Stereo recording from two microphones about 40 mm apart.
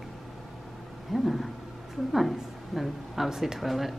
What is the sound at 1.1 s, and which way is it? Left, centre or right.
A woman's voice, centre.